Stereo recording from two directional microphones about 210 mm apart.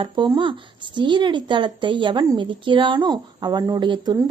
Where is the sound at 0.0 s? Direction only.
25° right (ahead or behind).